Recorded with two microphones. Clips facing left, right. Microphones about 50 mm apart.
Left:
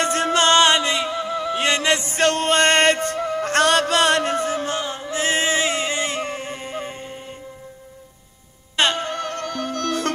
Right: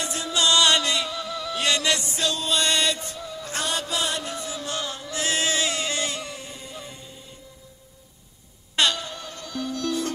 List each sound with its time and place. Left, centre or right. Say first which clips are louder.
0.0 s music: left 7 dB; left
0.7 s music: left 4 dB; left
2.1 s music: left 8 dB; left
4.7 s music: left 5 dB; left
8.7 s music: left 3 dB; left
9.0 s music: left 11 dB; left